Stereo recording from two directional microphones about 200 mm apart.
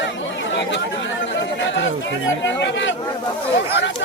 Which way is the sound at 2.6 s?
65° left (ahead or behind).